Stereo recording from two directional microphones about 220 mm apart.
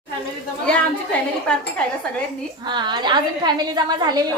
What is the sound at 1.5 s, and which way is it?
Speech, 5° left (ahead or behind).